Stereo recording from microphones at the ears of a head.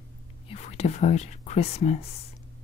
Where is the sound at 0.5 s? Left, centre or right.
Left.